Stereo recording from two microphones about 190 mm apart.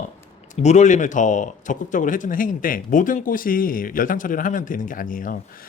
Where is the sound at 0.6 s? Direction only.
35° left (ahead or behind).